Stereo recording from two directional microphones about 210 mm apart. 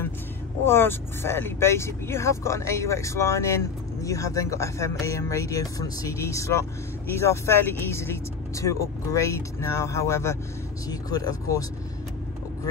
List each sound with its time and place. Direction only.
0.7 s speech: 10° left (ahead or behind)